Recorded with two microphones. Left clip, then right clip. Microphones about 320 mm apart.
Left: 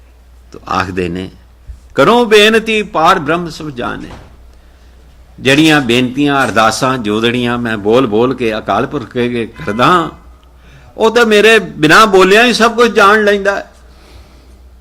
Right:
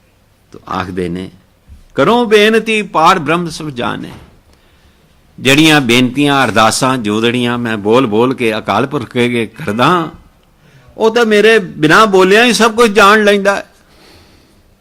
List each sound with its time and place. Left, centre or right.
0.5 s a man's voice: centre; by 4.1 s right
5.4 s a man's voice: right